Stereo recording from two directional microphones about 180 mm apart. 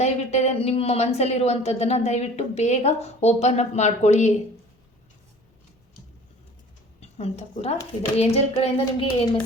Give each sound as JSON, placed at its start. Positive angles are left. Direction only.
{"t": 0.0, "sound": "speech", "side_deg": 35}
{"t": 7.0, "sound": "a woman's voice", "side_deg": 35}